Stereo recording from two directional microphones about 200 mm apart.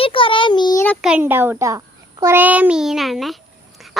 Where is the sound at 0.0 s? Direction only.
25° left (ahead or behind).